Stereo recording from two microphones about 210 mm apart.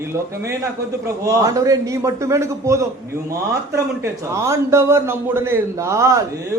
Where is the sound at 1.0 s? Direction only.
15° right (ahead or behind).